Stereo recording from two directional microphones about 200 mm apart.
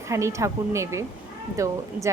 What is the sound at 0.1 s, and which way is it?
Speech, 15° right (ahead or behind).